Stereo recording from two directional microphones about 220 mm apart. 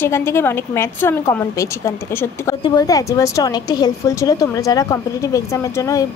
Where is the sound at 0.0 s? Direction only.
10° left (ahead or behind).